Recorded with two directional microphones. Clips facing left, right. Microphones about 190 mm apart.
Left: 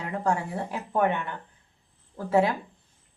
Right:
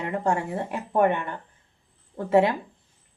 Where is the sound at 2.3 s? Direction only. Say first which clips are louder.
Right 3 dB; 20° right (ahead or behind).